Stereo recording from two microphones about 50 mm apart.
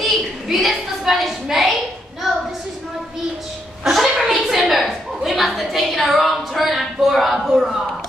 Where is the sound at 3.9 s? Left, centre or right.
Centre.